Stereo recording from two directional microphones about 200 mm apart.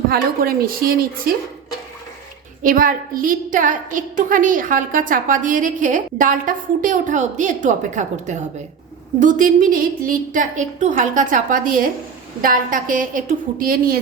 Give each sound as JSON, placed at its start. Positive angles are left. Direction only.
{"t": 0.1, "sound": "a woman's voice", "side_deg": -50}
{"t": 2.6, "sound": "a woman's voice", "side_deg": -45}